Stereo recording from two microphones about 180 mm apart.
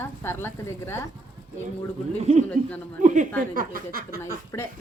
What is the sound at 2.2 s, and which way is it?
Speech, 35° right (ahead or behind).